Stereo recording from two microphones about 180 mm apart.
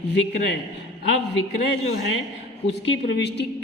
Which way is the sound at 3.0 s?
75° left (ahead or behind).